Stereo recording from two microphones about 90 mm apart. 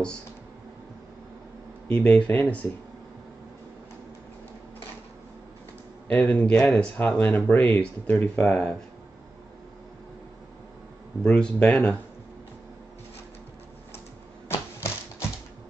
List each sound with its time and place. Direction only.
1.9 s speech: 10° left (ahead or behind)
6.0 s speech: 15° left (ahead or behind)
11.2 s speech: 10° left (ahead or behind)
14.5 s typewriter: 30° left (ahead or behind)